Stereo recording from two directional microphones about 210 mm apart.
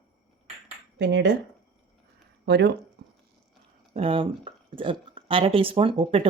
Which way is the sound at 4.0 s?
25° right (ahead or behind).